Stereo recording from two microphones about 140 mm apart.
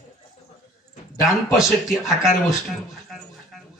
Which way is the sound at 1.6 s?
5° right (ahead or behind).